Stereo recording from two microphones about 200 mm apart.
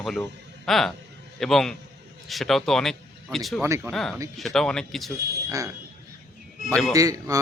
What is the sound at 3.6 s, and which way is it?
Speech, 15° right (ahead or behind).